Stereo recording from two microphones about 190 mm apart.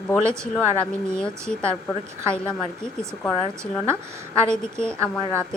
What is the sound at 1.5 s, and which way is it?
Speech, 5° left (ahead or behind).